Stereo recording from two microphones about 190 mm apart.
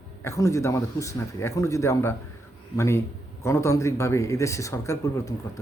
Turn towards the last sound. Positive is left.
turn(degrees=15)  # may be behind; listen again after turning